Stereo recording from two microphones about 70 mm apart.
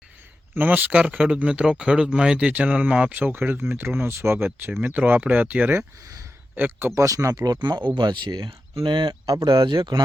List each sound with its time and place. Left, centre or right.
0.5 s speech: right
3.1 s speech: right
6.9 s speech: right
7.9 s speech: right